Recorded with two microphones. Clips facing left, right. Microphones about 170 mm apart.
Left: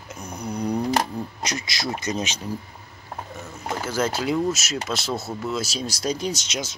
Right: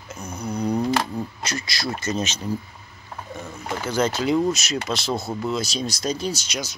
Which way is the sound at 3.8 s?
5° left (ahead or behind).